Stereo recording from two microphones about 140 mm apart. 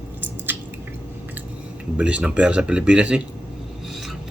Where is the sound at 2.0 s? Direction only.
10° right (ahead or behind).